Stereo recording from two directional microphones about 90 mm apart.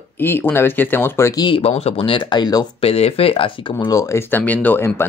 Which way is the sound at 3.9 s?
35° left (ahead or behind).